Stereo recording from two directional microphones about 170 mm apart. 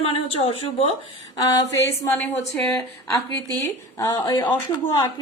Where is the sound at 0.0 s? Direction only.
35° left (ahead or behind).